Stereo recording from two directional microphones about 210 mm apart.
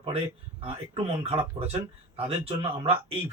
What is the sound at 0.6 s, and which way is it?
Speech, 25° right (ahead or behind).